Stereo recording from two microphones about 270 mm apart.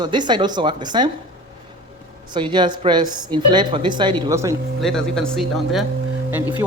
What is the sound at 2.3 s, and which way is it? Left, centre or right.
A woman's voice, centre.